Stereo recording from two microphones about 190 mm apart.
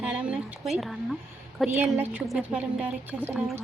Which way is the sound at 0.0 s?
5° right (ahead or behind).